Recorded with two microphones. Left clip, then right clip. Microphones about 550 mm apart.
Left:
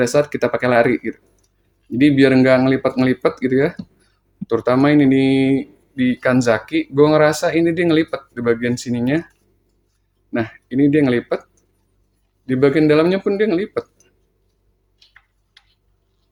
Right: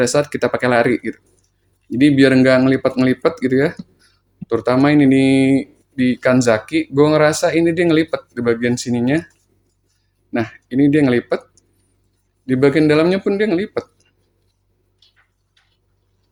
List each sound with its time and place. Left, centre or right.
0.0 s speech: left
10.3 s speech: left
12.5 s speech: left